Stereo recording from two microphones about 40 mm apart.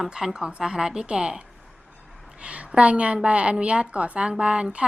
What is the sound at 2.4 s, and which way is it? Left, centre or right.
A woman's voice, right.